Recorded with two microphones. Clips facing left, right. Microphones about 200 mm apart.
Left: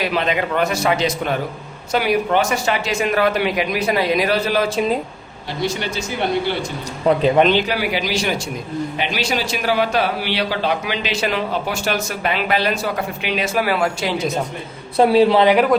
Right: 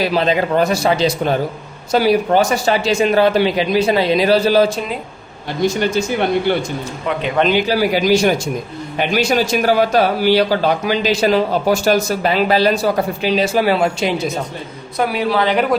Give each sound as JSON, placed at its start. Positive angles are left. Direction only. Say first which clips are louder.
{"t": 0.0, "sound": "a man's voice", "louder": "right 4 dB", "side_deg": -35}
{"t": 5.6, "sound": "a man's voice", "louder": "right 7 dB", "side_deg": -45}
{"t": 7.1, "sound": "speech", "louder": "left 6 dB", "side_deg": 35}
{"t": 7.7, "sound": "a man's voice", "louder": "right 7 dB", "side_deg": -40}
{"t": 14.9, "sound": "a man's voice", "louder": "left 5 dB", "side_deg": 30}